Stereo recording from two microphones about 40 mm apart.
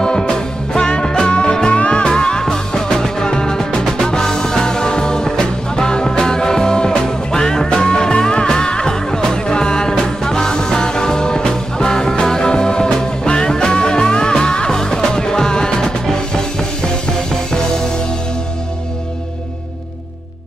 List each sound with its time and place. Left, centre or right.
0.0 s music: centre